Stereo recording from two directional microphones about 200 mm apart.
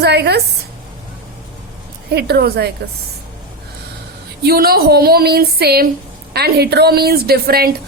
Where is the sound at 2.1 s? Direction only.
55° right (ahead or behind).